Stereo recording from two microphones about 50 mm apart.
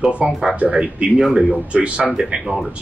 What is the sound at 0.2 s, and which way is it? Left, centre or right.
Speech, right.